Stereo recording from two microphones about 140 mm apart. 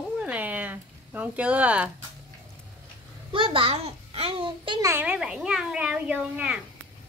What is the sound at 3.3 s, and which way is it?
A child's voice, 40° right (ahead or behind).